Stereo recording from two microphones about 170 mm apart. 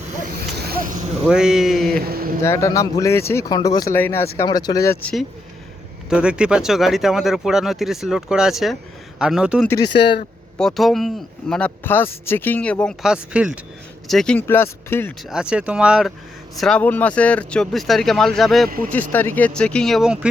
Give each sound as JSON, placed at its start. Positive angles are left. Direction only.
{"t": 0.5, "sound": "a sound", "side_deg": -65}
{"t": 1.3, "sound": "speech", "side_deg": -5}
{"t": 2.0, "sound": "a sound", "side_deg": -60}
{"t": 2.4, "sound": "speech", "side_deg": 15}
{"t": 6.1, "sound": "speech", "side_deg": -5}
{"t": 9.6, "sound": "speech", "side_deg": 25}
{"t": 10.6, "sound": "speech", "side_deg": 0}
{"t": 15.3, "sound": "speech", "side_deg": -5}